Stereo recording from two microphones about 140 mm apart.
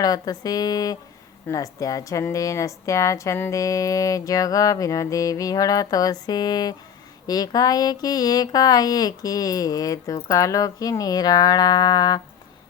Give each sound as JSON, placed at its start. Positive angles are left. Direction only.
{"t": 0.0, "sound": "a woman's voice", "side_deg": 25}